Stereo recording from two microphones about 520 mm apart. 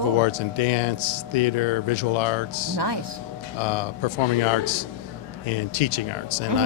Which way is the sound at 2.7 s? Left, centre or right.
Right.